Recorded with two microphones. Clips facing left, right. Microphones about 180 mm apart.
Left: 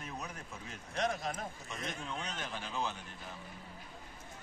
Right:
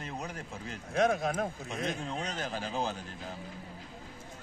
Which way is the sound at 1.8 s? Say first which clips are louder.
Right 6 dB; 35° right (ahead or behind).